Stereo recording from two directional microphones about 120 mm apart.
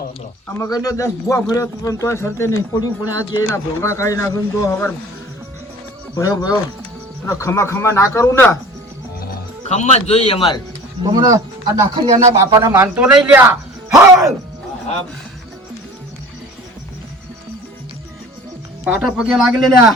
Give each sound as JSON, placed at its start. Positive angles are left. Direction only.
{"t": 0.6, "sound": "a man's voice", "side_deg": 30}
{"t": 6.1, "sound": "a man's voice", "side_deg": 30}
{"t": 9.6, "sound": "a man's voice", "side_deg": 65}
{"t": 11.0, "sound": "a man's voice", "side_deg": -30}
{"t": 13.0, "sound": "speech", "side_deg": -10}
{"t": 13.4, "sound": "speech", "side_deg": -20}
{"t": 18.9, "sound": "speech", "side_deg": -5}